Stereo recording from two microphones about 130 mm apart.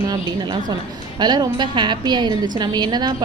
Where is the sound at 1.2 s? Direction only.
35° right (ahead or behind).